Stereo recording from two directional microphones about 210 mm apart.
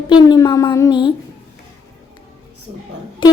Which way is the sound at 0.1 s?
20° left (ahead or behind).